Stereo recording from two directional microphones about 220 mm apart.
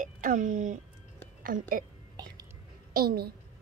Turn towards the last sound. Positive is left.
turn(degrees=-45)  # may be behind; listen again after turning